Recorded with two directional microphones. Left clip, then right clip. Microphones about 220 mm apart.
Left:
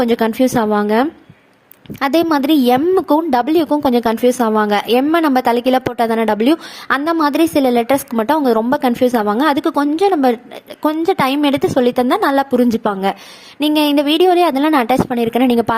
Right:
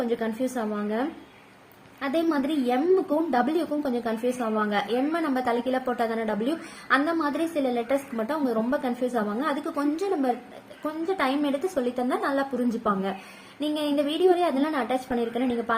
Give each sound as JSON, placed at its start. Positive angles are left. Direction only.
{"t": 0.0, "sound": "a woman's voice", "side_deg": 45}